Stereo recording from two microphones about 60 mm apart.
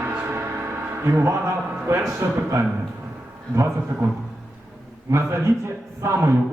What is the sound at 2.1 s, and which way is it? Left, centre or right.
A man's voice, right.